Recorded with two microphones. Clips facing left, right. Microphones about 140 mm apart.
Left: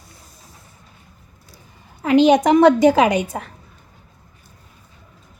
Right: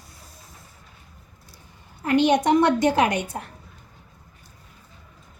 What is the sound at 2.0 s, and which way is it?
A woman's voice, 90° left.